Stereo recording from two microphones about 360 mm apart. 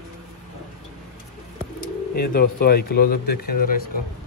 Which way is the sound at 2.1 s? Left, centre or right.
Left.